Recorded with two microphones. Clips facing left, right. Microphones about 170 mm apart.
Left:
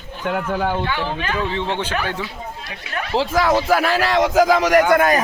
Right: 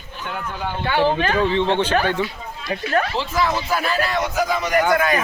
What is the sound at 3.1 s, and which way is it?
A man's voice, 90° left.